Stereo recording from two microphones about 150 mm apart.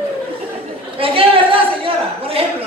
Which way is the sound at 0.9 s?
40° right (ahead or behind).